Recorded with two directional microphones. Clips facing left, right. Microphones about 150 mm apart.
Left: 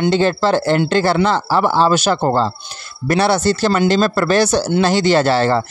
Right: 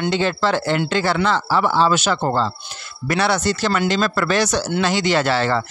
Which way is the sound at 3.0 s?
30° left (ahead or behind).